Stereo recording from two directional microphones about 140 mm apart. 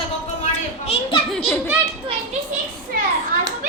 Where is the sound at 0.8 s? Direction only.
45° left (ahead or behind).